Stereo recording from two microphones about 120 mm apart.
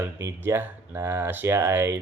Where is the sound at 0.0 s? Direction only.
20° right (ahead or behind).